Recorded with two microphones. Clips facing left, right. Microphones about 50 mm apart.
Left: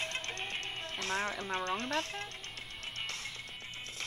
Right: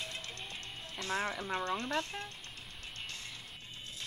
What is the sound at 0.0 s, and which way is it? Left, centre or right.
Music, left.